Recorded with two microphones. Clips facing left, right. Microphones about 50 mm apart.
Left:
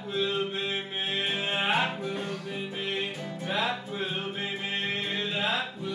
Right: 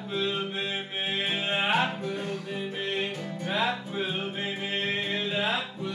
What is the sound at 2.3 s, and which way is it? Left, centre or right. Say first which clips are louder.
Music: right 2 dB; centre.